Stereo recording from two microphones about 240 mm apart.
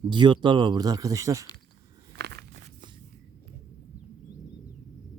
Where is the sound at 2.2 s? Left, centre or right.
Right.